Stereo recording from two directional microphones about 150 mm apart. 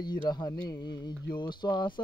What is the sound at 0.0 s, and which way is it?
Speech, 25° left (ahead or behind).